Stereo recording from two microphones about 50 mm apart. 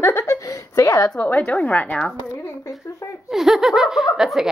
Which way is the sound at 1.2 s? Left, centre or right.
Left.